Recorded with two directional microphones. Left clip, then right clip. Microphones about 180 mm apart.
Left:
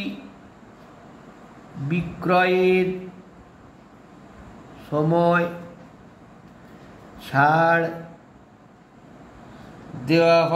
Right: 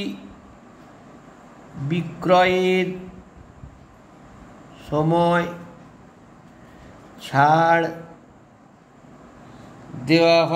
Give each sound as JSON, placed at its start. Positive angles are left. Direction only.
{"t": 1.9, "sound": "a man's voice", "side_deg": -20}
{"t": 4.9, "sound": "a man's voice", "side_deg": -20}
{"t": 7.2, "sound": "a man's voice", "side_deg": -20}
{"t": 10.0, "sound": "a man's voice", "side_deg": -20}